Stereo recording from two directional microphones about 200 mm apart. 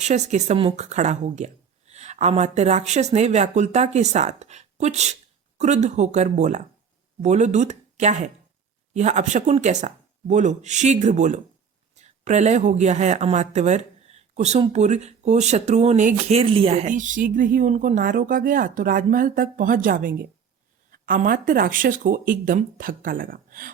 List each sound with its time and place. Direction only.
0.0 s speech: 35° right (ahead or behind)